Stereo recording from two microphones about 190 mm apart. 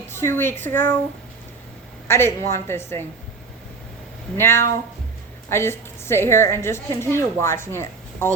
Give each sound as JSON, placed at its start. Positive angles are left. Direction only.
{"t": 0.1, "sound": "a woman's voice", "side_deg": 15}
{"t": 2.0, "sound": "a woman's voice", "side_deg": 15}
{"t": 4.4, "sound": "a woman's voice", "side_deg": 10}